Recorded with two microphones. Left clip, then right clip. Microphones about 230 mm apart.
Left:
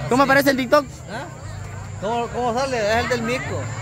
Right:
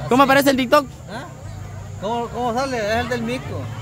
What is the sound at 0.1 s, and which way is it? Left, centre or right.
Speech, centre.